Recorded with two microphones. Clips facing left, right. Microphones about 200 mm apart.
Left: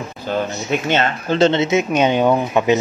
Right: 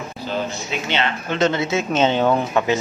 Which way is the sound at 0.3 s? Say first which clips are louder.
Left 5 dB; 50° left (ahead or behind).